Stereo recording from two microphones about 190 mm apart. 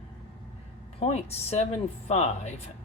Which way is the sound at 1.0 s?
35° left (ahead or behind).